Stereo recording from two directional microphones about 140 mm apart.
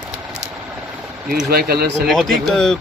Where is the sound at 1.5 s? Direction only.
90° right.